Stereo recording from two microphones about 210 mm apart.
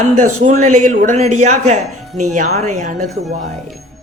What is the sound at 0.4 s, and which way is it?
Speech, 35° right (ahead or behind).